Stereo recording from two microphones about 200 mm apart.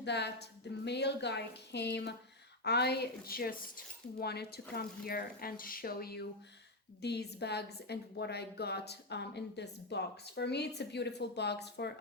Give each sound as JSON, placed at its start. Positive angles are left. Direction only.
{"t": 0.0, "sound": "a woman's voice", "side_deg": 60}